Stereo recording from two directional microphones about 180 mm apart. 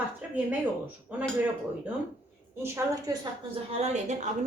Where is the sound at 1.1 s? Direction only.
10° right (ahead or behind).